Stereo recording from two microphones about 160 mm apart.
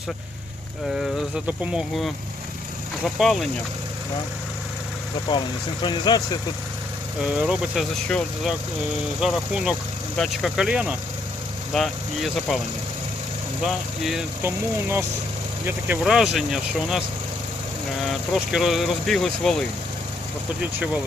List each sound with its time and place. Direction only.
1.5 s speech: 5° right (ahead or behind)
5.3 s speech: 30° left (ahead or behind)
7.2 s speech: 5° right (ahead or behind)
9.2 s speech: 5° right (ahead or behind)
14.4 s speech: 15° right (ahead or behind)
18.0 s speech: centre (ahead or behind)
20.6 s speech: 10° right (ahead or behind)